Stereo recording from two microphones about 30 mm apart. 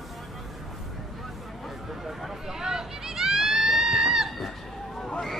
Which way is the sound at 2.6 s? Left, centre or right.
Centre.